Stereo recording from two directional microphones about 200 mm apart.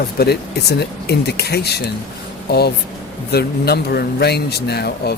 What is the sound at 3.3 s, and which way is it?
Speech, 55° left (ahead or behind).